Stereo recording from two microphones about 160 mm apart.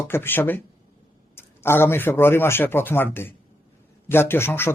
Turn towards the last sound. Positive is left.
turn(degrees=15)  # may be behind; listen again after turning